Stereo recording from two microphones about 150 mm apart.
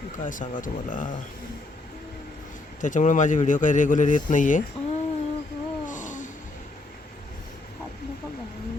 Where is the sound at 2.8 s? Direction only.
60° left (ahead or behind).